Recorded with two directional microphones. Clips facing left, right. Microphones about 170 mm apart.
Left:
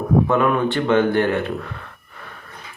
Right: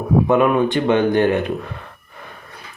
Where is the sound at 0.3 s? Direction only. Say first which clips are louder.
Right 3 dB; 15° right (ahead or behind).